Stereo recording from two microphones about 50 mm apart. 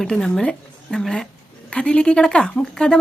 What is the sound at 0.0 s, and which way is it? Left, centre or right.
Speech, centre.